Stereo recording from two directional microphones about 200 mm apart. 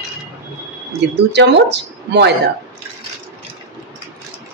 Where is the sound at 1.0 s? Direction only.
60° right (ahead or behind).